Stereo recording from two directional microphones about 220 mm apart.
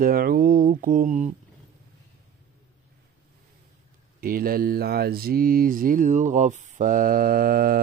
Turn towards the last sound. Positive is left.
turn(degrees=-40)  # may be behind; listen again after turning